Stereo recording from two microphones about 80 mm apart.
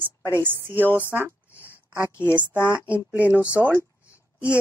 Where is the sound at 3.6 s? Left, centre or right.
Right.